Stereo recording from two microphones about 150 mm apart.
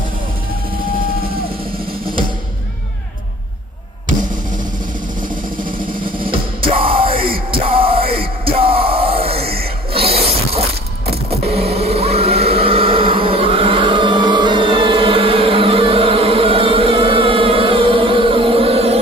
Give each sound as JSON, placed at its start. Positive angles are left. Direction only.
{"t": 5.6, "sound": "vehicle", "side_deg": -65}
{"t": 6.3, "sound": "music", "side_deg": -35}
{"t": 7.2, "sound": "music", "side_deg": -75}
{"t": 7.6, "sound": "music", "side_deg": -40}
{"t": 9.5, "sound": "a sound", "side_deg": -90}
{"t": 10.0, "sound": "a sound", "side_deg": -40}
{"t": 11.2, "sound": "vehicle", "side_deg": -40}